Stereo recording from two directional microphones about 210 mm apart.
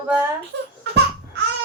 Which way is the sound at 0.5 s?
60° right (ahead or behind).